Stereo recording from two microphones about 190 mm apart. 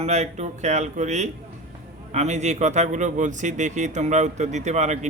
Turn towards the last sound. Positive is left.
turn(degrees=-35)  # may be behind; listen again after turning